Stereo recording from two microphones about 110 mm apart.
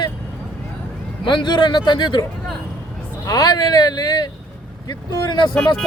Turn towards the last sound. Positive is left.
turn(degrees=5)  # may be behind; listen again after turning